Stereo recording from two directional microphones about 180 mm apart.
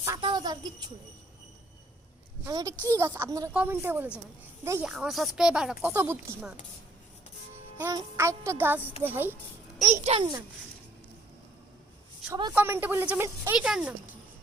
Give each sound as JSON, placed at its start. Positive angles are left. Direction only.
{"t": 0.2, "sound": "a sound", "side_deg": -25}
{"t": 2.5, "sound": "a woman's voice", "side_deg": -20}
{"t": 2.7, "sound": "a woman's voice", "side_deg": 10}
{"t": 3.0, "sound": "a woman's voice", "side_deg": -15}
{"t": 4.9, "sound": "a woman's voice", "side_deg": 0}
{"t": 7.8, "sound": "a woman's voice", "side_deg": -15}
{"t": 9.9, "sound": "a child's voice", "side_deg": -35}
{"t": 12.3, "sound": "a woman's voice", "side_deg": -25}
{"t": 12.5, "sound": "a woman's voice", "side_deg": -10}